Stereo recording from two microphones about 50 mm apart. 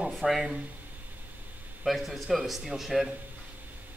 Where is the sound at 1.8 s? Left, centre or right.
Centre.